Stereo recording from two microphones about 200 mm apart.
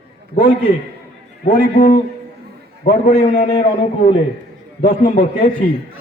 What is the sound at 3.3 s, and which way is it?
Speech, 35° left (ahead or behind).